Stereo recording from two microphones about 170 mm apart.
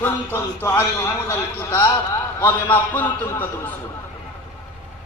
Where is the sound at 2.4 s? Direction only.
10° left (ahead or behind).